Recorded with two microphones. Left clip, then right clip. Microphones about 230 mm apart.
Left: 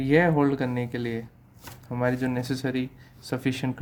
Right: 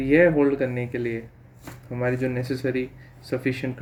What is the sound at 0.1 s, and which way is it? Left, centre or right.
Speech, left.